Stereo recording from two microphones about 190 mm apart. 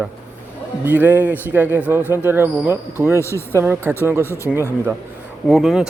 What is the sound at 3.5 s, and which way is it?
Speech, 10° right (ahead or behind).